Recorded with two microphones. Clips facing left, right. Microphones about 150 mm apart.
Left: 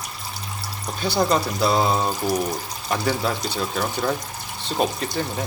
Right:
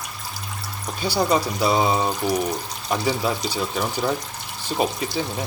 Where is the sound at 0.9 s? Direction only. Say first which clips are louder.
Even; 5° right (ahead or behind).